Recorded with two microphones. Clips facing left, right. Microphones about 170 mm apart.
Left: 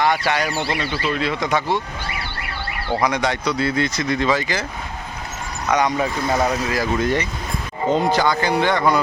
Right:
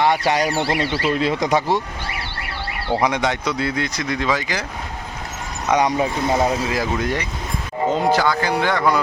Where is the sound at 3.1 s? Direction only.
20° right (ahead or behind).